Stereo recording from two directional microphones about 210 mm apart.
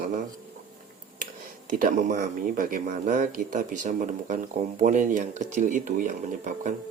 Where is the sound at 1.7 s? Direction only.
40° right (ahead or behind).